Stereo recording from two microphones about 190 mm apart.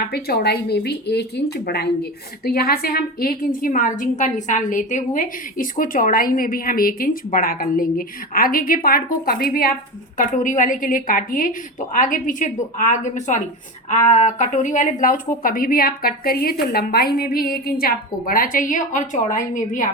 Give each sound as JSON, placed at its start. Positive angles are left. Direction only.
{"t": 0.1, "sound": "a woman's voice", "side_deg": 55}